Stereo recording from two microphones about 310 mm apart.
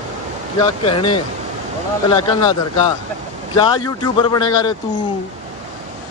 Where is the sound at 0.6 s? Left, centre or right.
Centre.